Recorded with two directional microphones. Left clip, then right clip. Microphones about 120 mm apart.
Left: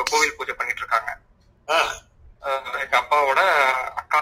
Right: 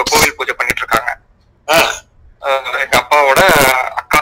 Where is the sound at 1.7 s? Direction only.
30° right (ahead or behind).